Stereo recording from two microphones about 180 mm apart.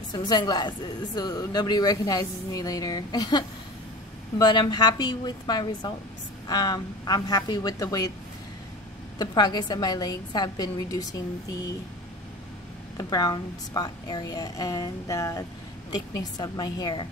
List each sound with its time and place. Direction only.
0.1 s a woman's voice: 25° left (ahead or behind)
9.2 s a woman's voice: 25° left (ahead or behind)
12.9 s a woman's voice: 20° left (ahead or behind)